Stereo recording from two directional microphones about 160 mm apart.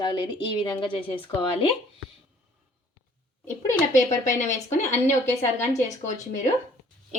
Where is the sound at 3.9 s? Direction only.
50° left (ahead or behind).